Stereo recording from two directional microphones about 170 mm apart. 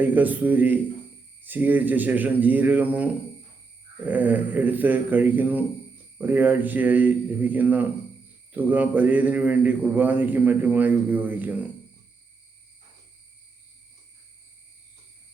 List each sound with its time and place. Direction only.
0.0 s a man's voice: 10° right (ahead or behind)